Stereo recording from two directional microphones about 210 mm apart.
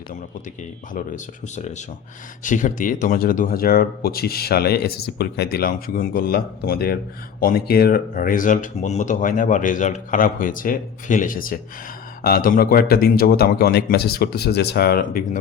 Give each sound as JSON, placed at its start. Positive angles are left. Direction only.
{"t": 0.9, "sound": "speech", "side_deg": 35}